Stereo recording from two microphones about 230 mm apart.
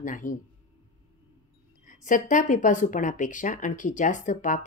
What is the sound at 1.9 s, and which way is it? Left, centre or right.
Speech, left.